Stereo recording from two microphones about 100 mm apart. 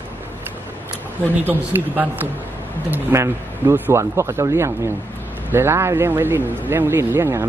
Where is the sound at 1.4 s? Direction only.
20° right (ahead or behind).